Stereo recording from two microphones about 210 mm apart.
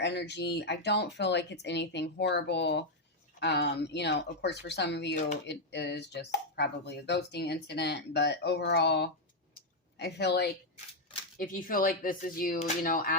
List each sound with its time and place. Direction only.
0.0 s speech: 55° left (ahead or behind)
11.3 s speech: 40° left (ahead or behind)